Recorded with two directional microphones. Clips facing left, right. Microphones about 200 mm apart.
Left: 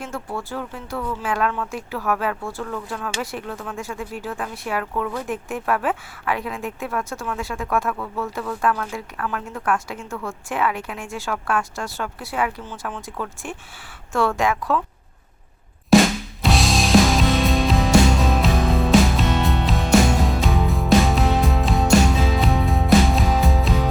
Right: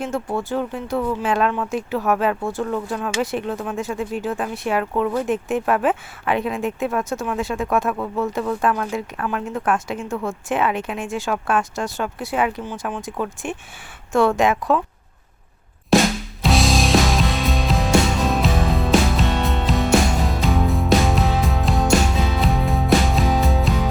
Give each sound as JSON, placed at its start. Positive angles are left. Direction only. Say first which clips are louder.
{"t": 0.0, "sound": "speech", "louder": "right 6 dB", "side_deg": -20}
{"t": 16.4, "sound": "music", "louder": "right 2 dB", "side_deg": 0}